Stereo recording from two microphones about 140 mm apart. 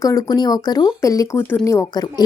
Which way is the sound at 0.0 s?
25° left (ahead or behind).